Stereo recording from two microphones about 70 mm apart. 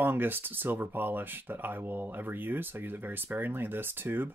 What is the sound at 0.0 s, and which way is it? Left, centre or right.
Speech, right.